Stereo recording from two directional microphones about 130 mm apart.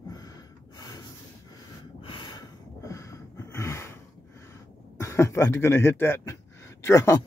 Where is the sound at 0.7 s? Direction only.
30° left (ahead or behind).